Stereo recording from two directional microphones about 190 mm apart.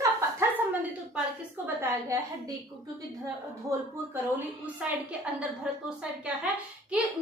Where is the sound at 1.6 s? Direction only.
10° right (ahead or behind).